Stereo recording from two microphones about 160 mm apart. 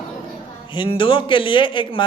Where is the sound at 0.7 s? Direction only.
30° left (ahead or behind).